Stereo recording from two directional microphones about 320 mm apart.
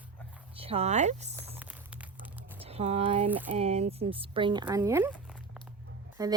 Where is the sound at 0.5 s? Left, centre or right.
Centre.